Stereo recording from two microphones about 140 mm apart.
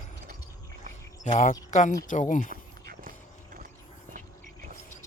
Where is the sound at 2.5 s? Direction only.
90° right.